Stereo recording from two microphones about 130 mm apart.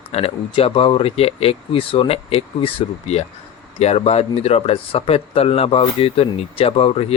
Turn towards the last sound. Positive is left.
turn(degrees=50)  # may be behind; listen again after turning